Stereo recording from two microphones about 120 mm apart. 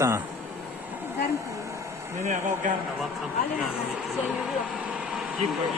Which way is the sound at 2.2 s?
90° right.